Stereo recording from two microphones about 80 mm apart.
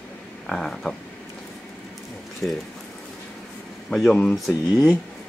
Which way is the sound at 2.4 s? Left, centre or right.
Centre.